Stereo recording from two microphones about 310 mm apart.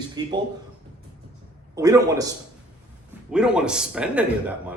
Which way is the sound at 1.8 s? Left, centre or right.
Centre.